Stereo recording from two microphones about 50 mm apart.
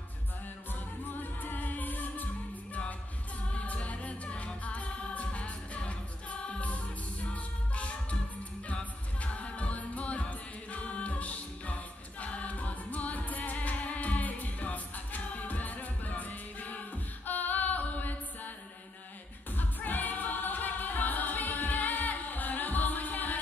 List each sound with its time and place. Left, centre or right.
1.4 s music: left
3.5 s music: left
10.7 s a capella: left
19.5 s music: left